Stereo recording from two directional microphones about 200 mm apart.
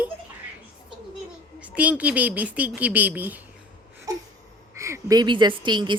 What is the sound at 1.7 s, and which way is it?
Speech, 5° right (ahead or behind).